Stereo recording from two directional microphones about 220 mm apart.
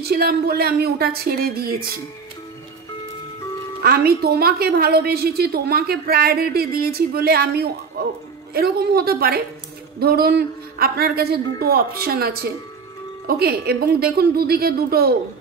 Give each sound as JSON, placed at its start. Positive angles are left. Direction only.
{"t": 0.0, "sound": "a woman's voice", "side_deg": -45}
{"t": 3.8, "sound": "a woman's voice", "side_deg": -45}